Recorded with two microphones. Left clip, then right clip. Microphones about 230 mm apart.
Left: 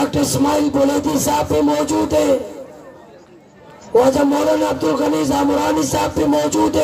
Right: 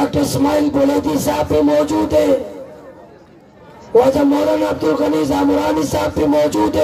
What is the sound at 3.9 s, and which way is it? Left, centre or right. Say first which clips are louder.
A man's voice: right 1 dB; left.